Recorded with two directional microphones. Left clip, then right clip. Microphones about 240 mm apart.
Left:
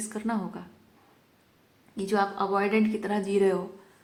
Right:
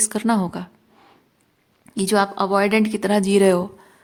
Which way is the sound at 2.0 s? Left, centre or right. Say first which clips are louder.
Right 7 dB; right.